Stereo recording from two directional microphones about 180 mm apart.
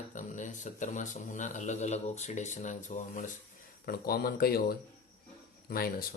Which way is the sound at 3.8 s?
55° left (ahead or behind).